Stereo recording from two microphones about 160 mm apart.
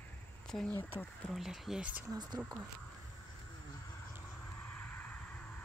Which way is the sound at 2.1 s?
25° right (ahead or behind).